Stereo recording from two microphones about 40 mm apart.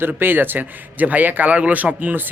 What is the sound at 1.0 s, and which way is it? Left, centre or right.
Speech, right.